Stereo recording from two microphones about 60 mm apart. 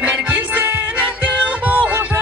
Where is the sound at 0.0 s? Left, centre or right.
Right.